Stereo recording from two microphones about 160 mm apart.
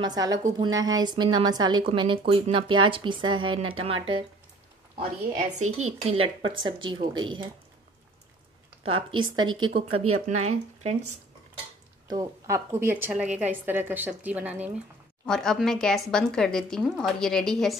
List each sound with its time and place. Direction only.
0.0 s a woman's voice: 25° right (ahead or behind)
5.6 s a woman's voice: 45° right (ahead or behind); by 7.3 s 30° right (ahead or behind)
8.8 s a woman's voice: 30° right (ahead or behind)
10.2 s speech: 45° right (ahead or behind)
12.1 s a woman's voice: 20° right (ahead or behind)
15.2 s speech: 5° left (ahead or behind)